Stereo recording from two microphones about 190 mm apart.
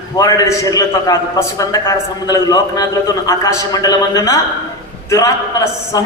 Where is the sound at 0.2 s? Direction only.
20° left (ahead or behind).